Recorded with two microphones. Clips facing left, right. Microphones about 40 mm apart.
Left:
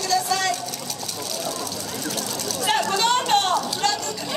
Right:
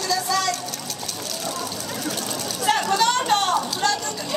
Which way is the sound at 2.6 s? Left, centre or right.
Left.